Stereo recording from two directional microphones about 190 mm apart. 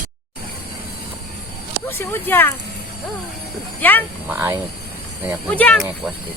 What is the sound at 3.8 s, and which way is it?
Speech, 10° left (ahead or behind).